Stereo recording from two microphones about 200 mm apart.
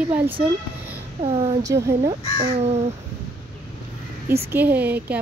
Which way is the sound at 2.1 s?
30° right (ahead or behind).